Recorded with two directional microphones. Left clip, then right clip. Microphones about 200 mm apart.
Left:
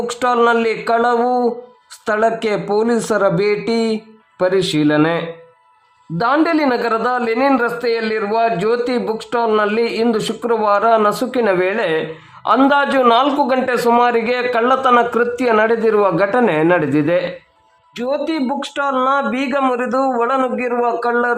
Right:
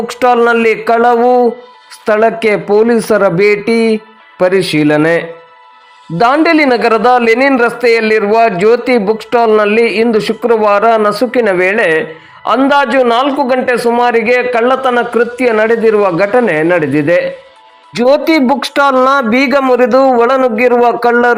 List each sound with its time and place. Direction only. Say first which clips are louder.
0.1 s a man's voice: right 6 dB; 20° right (ahead or behind)
6.1 s a man's voice: right 7 dB; 20° right (ahead or behind)
17.9 s speech: right 11 dB; 30° right (ahead or behind)